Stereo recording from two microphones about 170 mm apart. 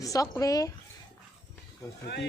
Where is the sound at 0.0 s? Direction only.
20° left (ahead or behind).